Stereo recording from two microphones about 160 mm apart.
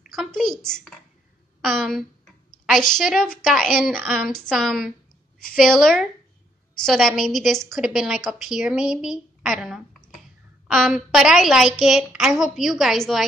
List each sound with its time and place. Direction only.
0.1 s a woman's voice: centre (ahead or behind)